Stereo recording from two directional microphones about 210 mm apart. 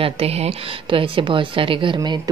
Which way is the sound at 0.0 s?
30° right (ahead or behind).